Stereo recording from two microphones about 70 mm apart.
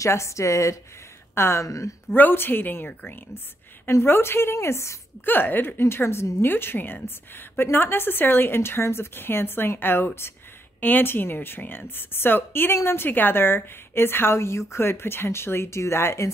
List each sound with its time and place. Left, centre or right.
0.0 s a woman's voice: left
2.0 s a woman's voice: left
5.2 s a woman's voice: left